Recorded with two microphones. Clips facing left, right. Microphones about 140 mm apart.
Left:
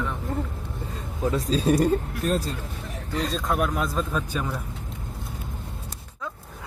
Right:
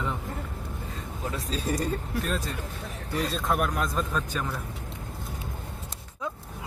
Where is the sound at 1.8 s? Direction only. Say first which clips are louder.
Left 7 dB; 40° left (ahead or behind).